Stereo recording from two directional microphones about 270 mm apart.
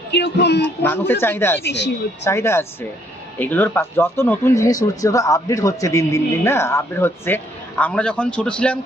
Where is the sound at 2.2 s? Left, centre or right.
Centre.